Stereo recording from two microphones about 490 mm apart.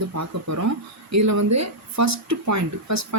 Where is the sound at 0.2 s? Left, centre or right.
Right.